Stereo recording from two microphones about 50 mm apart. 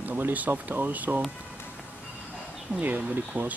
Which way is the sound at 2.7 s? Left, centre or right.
Right.